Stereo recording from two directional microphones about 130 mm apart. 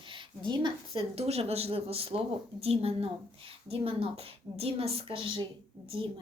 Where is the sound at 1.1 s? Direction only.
50° right (ahead or behind).